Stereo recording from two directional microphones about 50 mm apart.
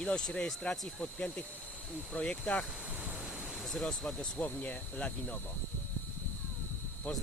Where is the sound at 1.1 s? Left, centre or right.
Left.